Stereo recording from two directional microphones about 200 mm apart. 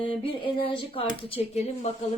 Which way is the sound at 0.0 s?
25° left (ahead or behind).